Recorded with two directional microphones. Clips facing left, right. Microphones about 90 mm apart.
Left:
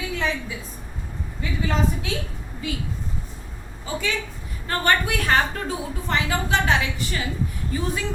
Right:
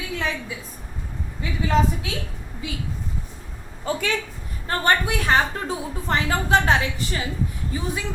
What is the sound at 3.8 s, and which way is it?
Speech, 55° right (ahead or behind).